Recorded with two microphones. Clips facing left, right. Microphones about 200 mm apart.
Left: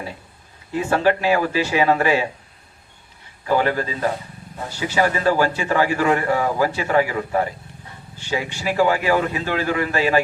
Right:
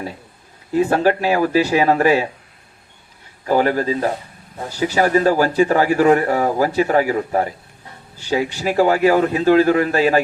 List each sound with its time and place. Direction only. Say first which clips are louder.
0.7 s a man's voice: right 3 dB; 40° right (ahead or behind)
3.4 s a man's voice: right 3 dB; 40° right (ahead or behind)